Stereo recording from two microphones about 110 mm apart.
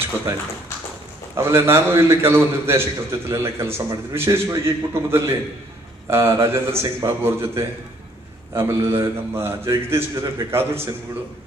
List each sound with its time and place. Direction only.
1.3 s a man's voice: 25° right (ahead or behind)